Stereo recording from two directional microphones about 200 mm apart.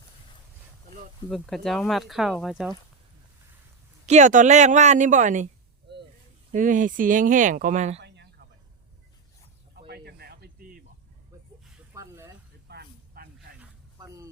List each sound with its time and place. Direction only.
1.3 s speech: centre (ahead or behind)
4.0 s speech: 35° right (ahead or behind)
6.5 s speech: 40° right (ahead or behind)
8.0 s a sound: 55° right (ahead or behind)
9.7 s snake: 55° right (ahead or behind)
11.9 s a sound: 15° right (ahead or behind)
12.6 s snake: 55° right (ahead or behind)
14.0 s speech: 15° right (ahead or behind)